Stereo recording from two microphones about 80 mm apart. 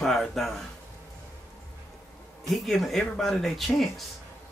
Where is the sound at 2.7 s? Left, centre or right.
Centre.